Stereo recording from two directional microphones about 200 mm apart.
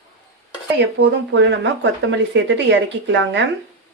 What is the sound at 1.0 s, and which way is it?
Speech, 60° right (ahead or behind).